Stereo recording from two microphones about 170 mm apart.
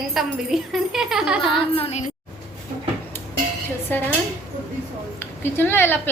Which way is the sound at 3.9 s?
10° left (ahead or behind).